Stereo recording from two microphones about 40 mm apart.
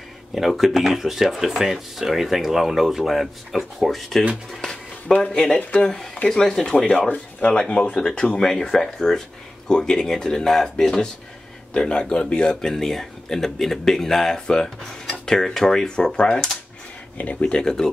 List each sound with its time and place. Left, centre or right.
0.6 s speech: centre
4.6 s a sound: centre
5.1 s speech: left
6.9 s speech: left
7.5 s speech: left
8.4 s speech: centre
11.7 s speech: left
12.6 s speech: centre
15.0 s cutlery: centre
16.2 s speech: left
17.2 s speech: left; by 17.9 s centre